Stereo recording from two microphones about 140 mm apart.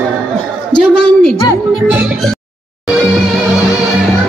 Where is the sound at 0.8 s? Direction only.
5° left (ahead or behind).